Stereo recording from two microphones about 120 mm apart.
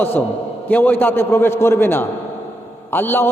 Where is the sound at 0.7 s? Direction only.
15° left (ahead or behind).